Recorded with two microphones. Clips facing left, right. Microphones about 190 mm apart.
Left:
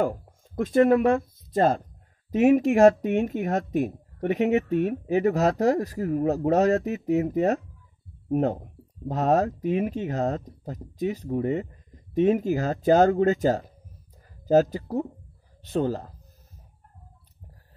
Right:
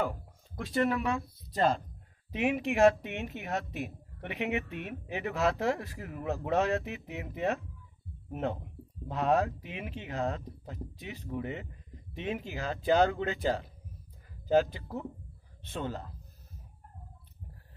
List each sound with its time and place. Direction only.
0.0 s speech: 50° left (ahead or behind)